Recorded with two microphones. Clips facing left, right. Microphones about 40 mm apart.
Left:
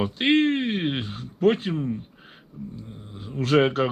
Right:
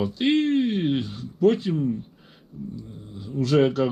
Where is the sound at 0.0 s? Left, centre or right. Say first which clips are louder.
Left 1 dB; left.